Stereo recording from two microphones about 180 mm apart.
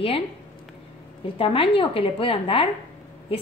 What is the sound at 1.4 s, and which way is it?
A woman's voice, 30° left (ahead or behind).